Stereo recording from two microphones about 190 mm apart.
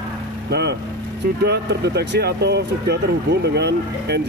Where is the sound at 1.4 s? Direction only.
60° right (ahead or behind).